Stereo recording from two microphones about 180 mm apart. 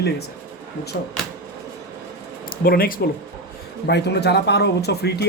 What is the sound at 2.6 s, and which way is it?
Speech, 55° left (ahead or behind).